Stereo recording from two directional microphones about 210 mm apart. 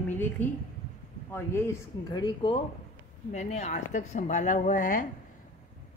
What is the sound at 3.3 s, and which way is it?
A woman's voice, 35° left (ahead or behind).